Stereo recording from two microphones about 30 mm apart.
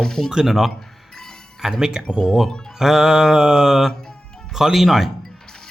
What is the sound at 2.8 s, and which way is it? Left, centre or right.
Mantra, centre.